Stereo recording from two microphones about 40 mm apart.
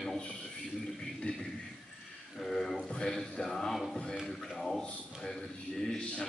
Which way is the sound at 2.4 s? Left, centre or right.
Centre.